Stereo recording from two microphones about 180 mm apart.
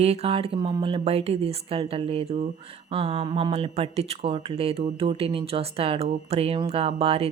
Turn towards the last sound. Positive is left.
turn(degrees=-35)  # may be behind; listen again after turning